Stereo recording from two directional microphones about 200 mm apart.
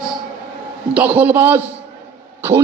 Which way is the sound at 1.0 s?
10° right (ahead or behind).